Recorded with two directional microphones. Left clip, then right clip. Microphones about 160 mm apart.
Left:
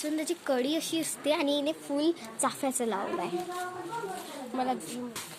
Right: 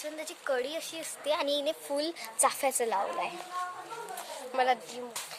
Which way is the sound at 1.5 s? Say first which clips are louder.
Left 1 dB; 35° right (ahead or behind).